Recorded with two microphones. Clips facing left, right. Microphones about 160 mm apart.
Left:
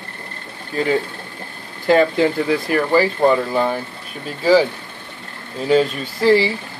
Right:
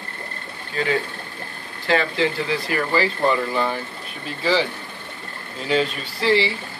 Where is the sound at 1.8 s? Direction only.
45° left (ahead or behind).